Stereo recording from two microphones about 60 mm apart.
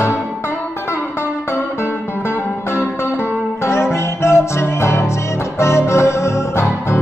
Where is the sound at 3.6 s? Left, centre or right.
Left.